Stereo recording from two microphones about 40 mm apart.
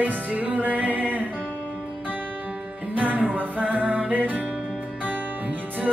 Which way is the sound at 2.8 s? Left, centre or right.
Right.